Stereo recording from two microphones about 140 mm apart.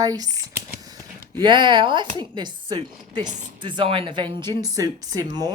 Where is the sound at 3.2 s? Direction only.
60° right (ahead or behind).